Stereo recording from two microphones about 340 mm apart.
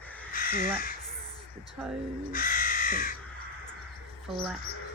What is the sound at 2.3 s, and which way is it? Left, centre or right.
Crow, left.